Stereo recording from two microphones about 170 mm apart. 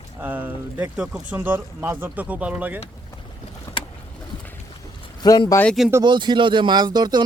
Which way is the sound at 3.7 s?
15° left (ahead or behind).